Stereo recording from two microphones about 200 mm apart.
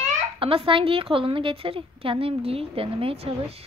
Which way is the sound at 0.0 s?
25° right (ahead or behind).